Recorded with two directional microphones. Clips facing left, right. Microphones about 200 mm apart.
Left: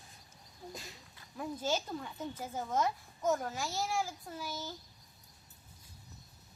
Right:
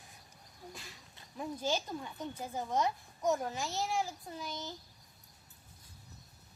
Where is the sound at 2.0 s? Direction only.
15° right (ahead or behind).